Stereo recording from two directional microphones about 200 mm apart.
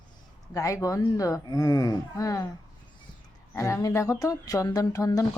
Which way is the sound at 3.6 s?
15° left (ahead or behind).